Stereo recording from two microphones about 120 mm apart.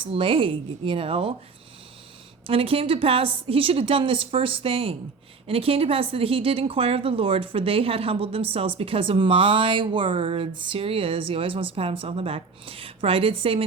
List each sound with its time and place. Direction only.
0.1 s speech: 50° right (ahead or behind)
2.5 s speech: 55° right (ahead or behind)